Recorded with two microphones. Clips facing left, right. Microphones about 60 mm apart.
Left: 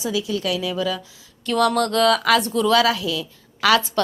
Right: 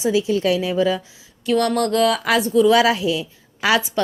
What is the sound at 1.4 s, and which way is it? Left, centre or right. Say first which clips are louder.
Speech: right 1 dB; centre.